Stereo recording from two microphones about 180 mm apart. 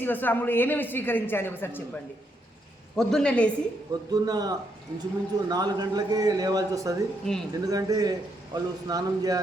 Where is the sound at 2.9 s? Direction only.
Centre (ahead or behind).